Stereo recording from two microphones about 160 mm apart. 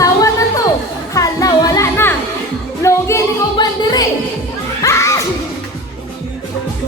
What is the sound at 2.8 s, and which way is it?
A woman's voice, 20° left (ahead or behind).